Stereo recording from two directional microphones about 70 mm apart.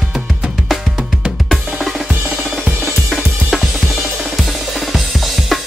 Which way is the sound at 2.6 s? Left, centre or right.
Right.